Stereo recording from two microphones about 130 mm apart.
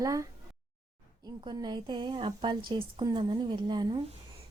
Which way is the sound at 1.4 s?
35° right (ahead or behind).